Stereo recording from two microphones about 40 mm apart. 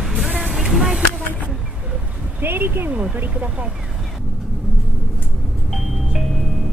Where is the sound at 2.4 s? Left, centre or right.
Right.